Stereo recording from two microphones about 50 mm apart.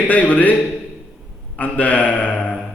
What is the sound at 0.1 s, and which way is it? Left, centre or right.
Speech, left.